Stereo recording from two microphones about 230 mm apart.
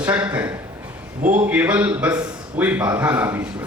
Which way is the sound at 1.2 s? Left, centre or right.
Right.